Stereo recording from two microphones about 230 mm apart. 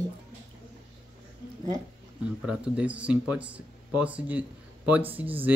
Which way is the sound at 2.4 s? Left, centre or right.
Centre.